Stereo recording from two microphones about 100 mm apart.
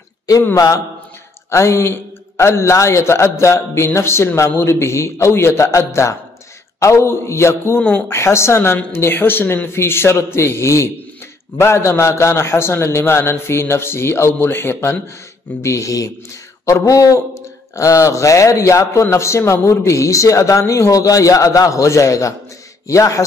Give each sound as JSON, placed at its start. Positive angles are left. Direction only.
{"t": 1.5, "sound": "a man's voice", "side_deg": 30}